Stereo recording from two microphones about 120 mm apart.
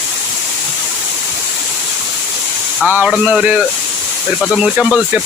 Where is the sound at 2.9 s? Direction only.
15° right (ahead or behind).